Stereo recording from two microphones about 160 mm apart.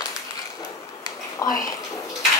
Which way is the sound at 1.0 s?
20° left (ahead or behind).